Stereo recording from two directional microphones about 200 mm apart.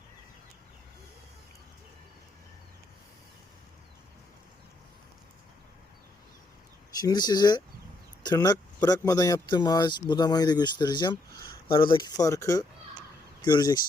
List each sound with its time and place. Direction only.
7.0 s speech: 20° left (ahead or behind)